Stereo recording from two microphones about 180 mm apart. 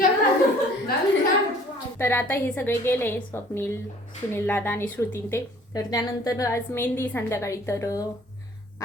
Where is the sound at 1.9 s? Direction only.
10° left (ahead or behind).